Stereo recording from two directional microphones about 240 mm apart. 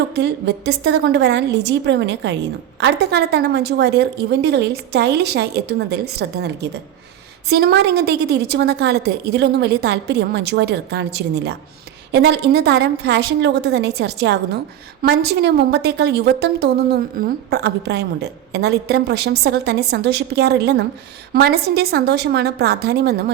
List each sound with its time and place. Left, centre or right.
0.1 s a woman's voice: right